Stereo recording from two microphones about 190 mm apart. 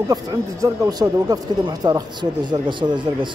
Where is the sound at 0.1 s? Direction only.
20° right (ahead or behind).